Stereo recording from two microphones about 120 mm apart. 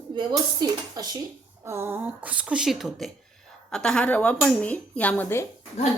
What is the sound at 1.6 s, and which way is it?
A woman's voice, 20° right (ahead or behind).